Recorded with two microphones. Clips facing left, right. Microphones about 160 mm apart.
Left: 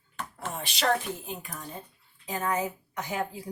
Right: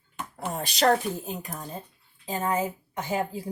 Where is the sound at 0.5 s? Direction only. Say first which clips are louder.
Right 5 dB; 40° right (ahead or behind).